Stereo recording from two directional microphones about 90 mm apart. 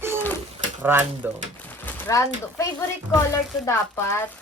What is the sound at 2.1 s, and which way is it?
Speech, 35° left (ahead or behind).